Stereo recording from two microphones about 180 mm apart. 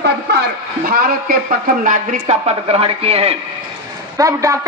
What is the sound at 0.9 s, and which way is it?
A man's voice, 55° right (ahead or behind).